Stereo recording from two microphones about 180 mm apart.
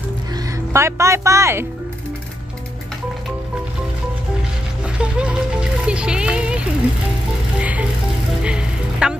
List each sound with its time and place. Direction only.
0.7 s speech: 15° right (ahead or behind)
4.9 s music: 5° right (ahead or behind)